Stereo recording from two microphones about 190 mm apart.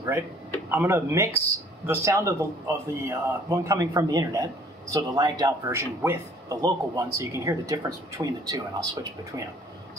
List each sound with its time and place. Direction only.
0.7 s a man's voice: 15° right (ahead or behind)